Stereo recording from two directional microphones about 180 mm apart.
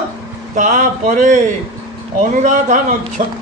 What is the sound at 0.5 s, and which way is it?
Speech, 45° right (ahead or behind).